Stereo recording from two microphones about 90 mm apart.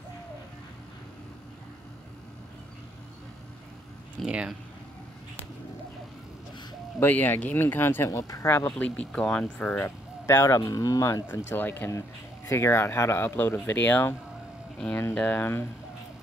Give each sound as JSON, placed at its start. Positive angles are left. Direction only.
{"t": 4.3, "sound": "speech", "side_deg": -10}
{"t": 7.0, "sound": "speech", "side_deg": 20}
{"t": 8.1, "sound": "speech", "side_deg": 35}
{"t": 10.2, "sound": "speech", "side_deg": 35}
{"t": 11.4, "sound": "speech", "side_deg": 20}
{"t": 15.1, "sound": "speech", "side_deg": 20}